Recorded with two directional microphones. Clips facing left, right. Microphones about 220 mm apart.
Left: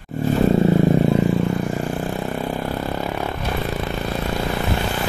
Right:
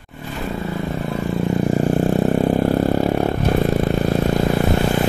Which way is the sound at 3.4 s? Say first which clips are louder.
Right 7 dB; 45° right (ahead or behind).